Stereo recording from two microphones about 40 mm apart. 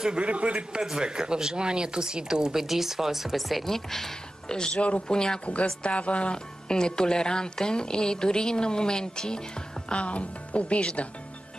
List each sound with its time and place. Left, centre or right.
0.2 s a man's voice: right
0.9 s speech: centre
4.5 s speech: left
5.4 s speech: left
6.3 s speech: centre
9.8 s speech: left